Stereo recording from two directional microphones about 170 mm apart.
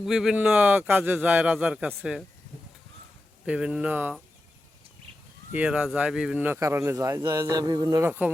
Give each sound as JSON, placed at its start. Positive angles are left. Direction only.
{"t": 0.0, "sound": "speech", "side_deg": 0}
{"t": 3.4, "sound": "speech", "side_deg": -5}
{"t": 5.5, "sound": "speech", "side_deg": -5}